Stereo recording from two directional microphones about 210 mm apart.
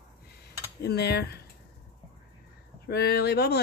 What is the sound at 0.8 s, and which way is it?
Speech, 50° left (ahead or behind).